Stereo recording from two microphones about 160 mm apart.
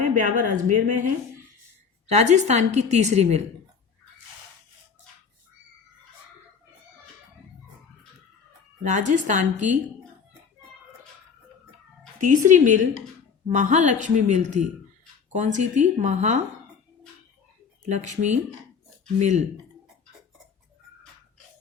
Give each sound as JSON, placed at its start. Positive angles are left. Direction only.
{"t": 0.0, "sound": "a woman's voice", "side_deg": -50}
{"t": 2.0, "sound": "a woman's voice", "side_deg": -45}
{"t": 8.8, "sound": "a woman's voice", "side_deg": -50}
{"t": 12.2, "sound": "a woman's voice", "side_deg": -55}
{"t": 17.8, "sound": "a woman's voice", "side_deg": -45}